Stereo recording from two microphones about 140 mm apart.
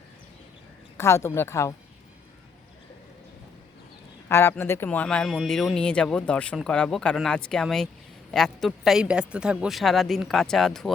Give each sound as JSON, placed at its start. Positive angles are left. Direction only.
{"t": 0.9, "sound": "speech", "side_deg": 20}
{"t": 4.3, "sound": "a man's voice", "side_deg": 20}